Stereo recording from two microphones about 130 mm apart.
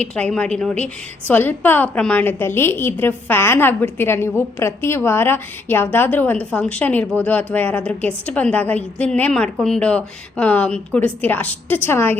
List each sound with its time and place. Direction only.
0.0 s a woman's voice: 10° left (ahead or behind)